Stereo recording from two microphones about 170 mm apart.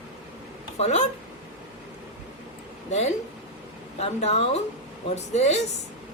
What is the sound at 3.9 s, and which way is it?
A woman's voice, 40° left (ahead or behind).